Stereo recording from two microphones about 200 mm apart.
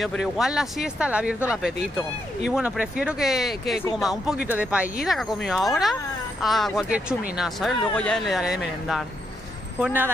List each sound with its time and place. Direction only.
0.0 s speech: centre (ahead or behind)